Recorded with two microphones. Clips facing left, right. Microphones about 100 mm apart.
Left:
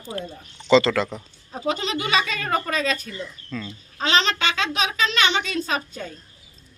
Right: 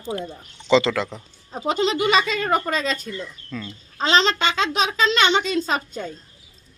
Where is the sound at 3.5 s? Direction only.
10° right (ahead or behind).